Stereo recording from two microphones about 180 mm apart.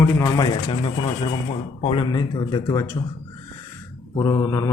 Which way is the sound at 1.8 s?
30° left (ahead or behind).